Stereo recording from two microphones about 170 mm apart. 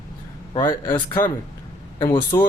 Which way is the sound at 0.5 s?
30° left (ahead or behind).